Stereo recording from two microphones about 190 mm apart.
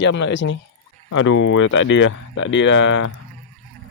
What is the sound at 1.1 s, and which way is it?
Speech, 90° left.